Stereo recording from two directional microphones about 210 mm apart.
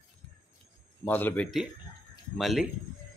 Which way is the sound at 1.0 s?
10° left (ahead or behind).